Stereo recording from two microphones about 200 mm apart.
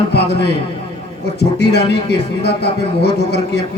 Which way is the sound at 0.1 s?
55° left (ahead or behind).